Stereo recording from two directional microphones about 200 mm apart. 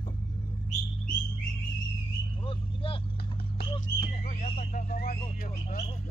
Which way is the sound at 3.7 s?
25° left (ahead or behind).